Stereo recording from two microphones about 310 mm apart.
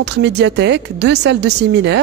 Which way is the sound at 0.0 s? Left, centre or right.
Right.